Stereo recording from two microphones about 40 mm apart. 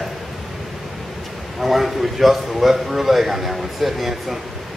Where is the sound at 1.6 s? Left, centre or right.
Centre.